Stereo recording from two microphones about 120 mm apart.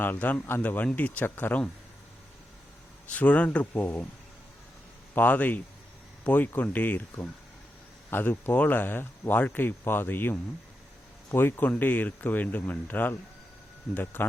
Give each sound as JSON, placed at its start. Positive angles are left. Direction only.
{"t": 0.0, "sound": "speech", "side_deg": 15}
{"t": 3.1, "sound": "speech", "side_deg": 10}
{"t": 5.1, "sound": "speech", "side_deg": 15}